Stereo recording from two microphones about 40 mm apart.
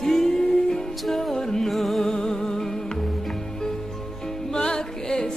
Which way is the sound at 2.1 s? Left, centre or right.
Centre.